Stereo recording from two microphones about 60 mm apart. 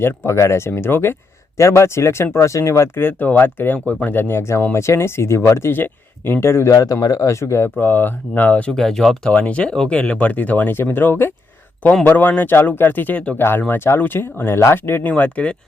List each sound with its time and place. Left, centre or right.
0.3 s speech: left
1.5 s speech: left
6.7 s speech: left
7.8 s speech: left
8.7 s speech: centre
9.3 s speech: left
13.4 s speech: left
15.0 s speech: left